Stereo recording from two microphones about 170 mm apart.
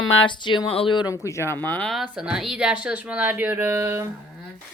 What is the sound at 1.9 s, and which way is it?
Speech, 5° right (ahead or behind).